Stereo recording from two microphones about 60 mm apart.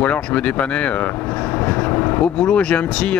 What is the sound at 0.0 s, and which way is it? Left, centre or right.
Speech, left.